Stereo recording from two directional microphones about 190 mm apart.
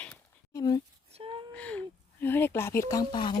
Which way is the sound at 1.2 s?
30° right (ahead or behind).